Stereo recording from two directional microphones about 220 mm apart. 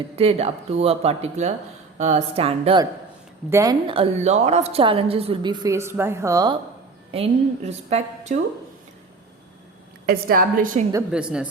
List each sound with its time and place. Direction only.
0.2 s a woman's voice: 30° right (ahead or behind)
3.5 s a woman's voice: 15° right (ahead or behind)
7.1 s a woman's voice: 25° right (ahead or behind)
10.1 s a woman's voice: 40° right (ahead or behind)
11.1 s a woman's voice: 5° right (ahead or behind)